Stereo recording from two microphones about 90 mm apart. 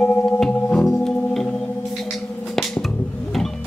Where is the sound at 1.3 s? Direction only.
10° left (ahead or behind).